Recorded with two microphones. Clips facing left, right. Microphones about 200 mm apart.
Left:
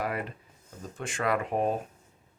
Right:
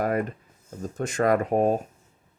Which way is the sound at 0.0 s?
45° right (ahead or behind).